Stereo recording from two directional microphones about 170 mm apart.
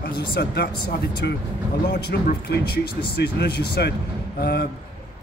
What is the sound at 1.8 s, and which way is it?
Speech, 80° left.